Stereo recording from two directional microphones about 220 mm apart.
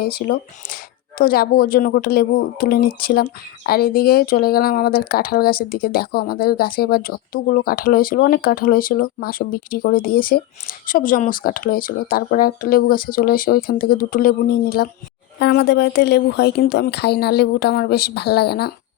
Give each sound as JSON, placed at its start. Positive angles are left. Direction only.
{"t": 0.0, "sound": "speech", "side_deg": 45}